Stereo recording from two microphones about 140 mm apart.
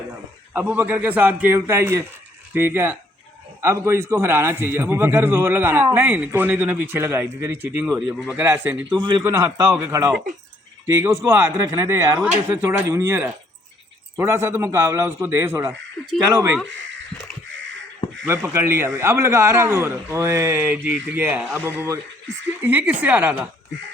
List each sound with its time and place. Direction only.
0.5 s a man's voice: 15° right (ahead or behind)
7.9 s a man's voice: 5° right (ahead or behind); by 16.6 s 20° right (ahead or behind)
18.3 s a man's voice: 20° right (ahead or behind)